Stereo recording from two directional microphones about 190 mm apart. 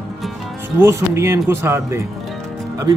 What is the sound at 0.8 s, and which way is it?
Speech, 15° right (ahead or behind).